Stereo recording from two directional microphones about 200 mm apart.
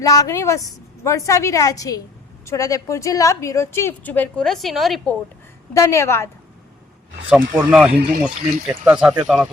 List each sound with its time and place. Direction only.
0.0 s speech: 15° left (ahead or behind); by 5.1 s centre (ahead or behind)
5.7 s speech: 15° left (ahead or behind)
7.5 s speech: 10° right (ahead or behind)